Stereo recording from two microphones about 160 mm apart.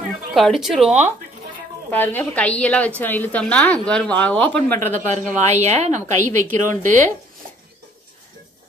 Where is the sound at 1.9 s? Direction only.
10° left (ahead or behind).